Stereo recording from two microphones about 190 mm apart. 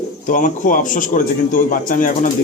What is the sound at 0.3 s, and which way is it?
Speech, 45° left (ahead or behind).